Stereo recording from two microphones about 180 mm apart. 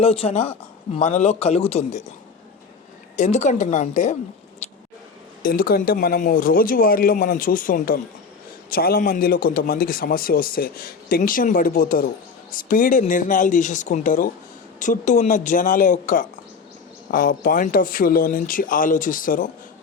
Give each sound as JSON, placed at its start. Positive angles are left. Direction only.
{"t": 0.0, "sound": "a man's voice", "side_deg": 35}
{"t": 3.2, "sound": "a man's voice", "side_deg": 40}
{"t": 4.6, "sound": "squish", "side_deg": 35}
{"t": 5.4, "sound": "a man's voice", "side_deg": 55}